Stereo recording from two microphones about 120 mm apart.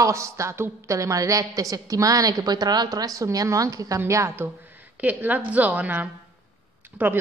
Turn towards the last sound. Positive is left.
turn(degrees=-15)  # may be behind; listen again after turning